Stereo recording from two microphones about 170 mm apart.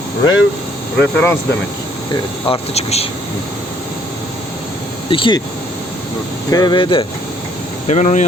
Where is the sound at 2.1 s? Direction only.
30° left (ahead or behind).